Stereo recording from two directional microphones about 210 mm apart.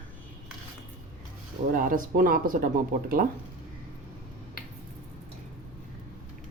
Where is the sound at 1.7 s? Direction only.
40° right (ahead or behind).